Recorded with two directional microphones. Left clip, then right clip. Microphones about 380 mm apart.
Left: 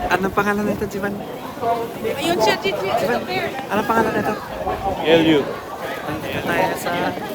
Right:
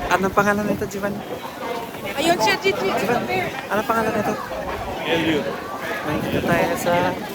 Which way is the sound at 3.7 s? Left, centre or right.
Centre.